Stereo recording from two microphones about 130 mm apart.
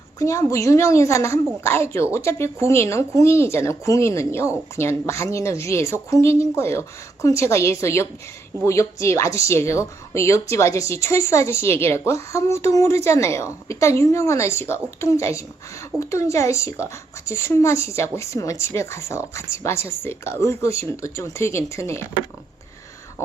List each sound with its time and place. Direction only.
0.2 s speech: 25° left (ahead or behind)